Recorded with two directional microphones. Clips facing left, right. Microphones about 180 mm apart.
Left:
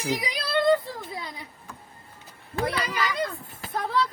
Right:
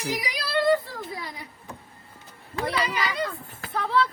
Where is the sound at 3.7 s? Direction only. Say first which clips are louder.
Right 2 dB; 45° left (ahead or behind).